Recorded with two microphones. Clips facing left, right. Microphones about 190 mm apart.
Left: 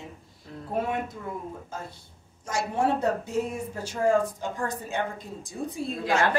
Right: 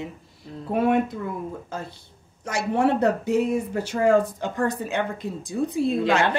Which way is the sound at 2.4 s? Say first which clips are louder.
Right 4 dB; 65° right (ahead or behind).